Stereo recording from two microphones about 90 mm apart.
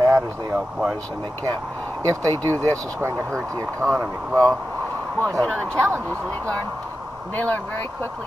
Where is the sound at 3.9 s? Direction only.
30° right (ahead or behind).